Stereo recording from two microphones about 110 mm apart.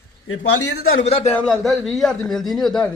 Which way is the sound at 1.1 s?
65° left (ahead or behind).